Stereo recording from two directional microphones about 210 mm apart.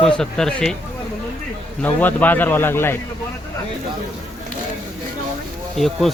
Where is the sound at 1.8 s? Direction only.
10° left (ahead or behind).